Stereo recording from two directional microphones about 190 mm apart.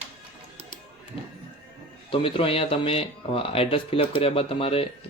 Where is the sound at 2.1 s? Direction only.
30° left (ahead or behind).